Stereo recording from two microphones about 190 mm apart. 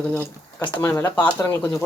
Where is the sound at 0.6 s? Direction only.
25° left (ahead or behind).